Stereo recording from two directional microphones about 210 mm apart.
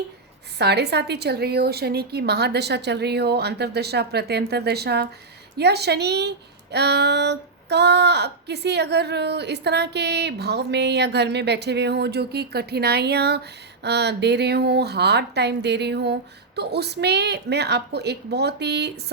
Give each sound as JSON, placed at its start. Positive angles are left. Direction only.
{"t": 0.6, "sound": "speech", "side_deg": -50}